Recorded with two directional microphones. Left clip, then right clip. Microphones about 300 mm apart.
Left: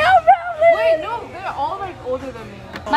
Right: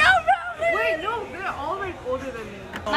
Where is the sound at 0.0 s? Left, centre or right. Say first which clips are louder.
Left 6 dB; left.